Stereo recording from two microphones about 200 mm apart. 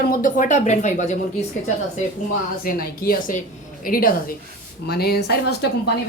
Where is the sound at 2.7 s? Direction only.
45° left (ahead or behind).